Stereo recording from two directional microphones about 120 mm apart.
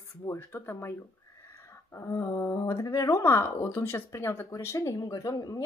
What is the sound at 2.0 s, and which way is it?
Speech, 25° left (ahead or behind).